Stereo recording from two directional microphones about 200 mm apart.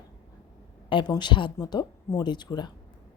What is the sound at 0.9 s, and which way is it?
A woman's voice, 20° left (ahead or behind).